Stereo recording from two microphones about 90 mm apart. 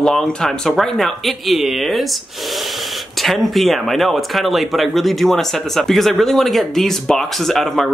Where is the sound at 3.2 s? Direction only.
Centre (ahead or behind).